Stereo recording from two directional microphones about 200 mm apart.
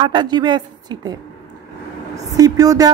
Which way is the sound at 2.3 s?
15° right (ahead or behind).